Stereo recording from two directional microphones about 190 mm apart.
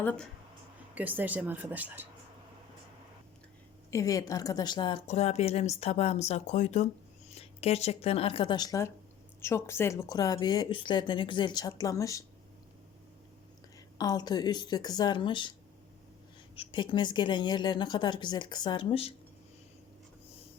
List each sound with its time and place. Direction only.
0.0 s speech: 5° left (ahead or behind)
0.9 s speech: 10° right (ahead or behind)
3.9 s speech: 20° left (ahead or behind)
14.0 s speech: 20° left (ahead or behind)
16.6 s speech: 25° left (ahead or behind)